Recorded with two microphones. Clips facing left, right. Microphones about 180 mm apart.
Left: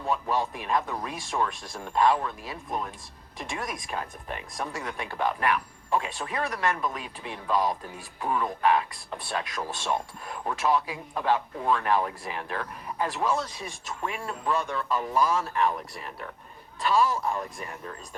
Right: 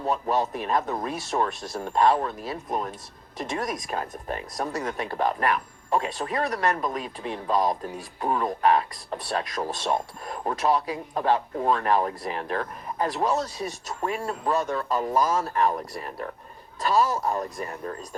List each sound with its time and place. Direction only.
0.0 s speech: 40° right (ahead or behind)